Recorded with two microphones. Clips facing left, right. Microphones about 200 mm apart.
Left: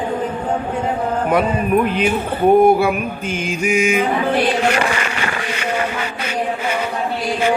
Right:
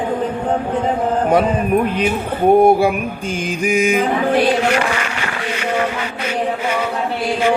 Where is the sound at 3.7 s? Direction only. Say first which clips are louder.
Right 1 dB; 35° right (ahead or behind).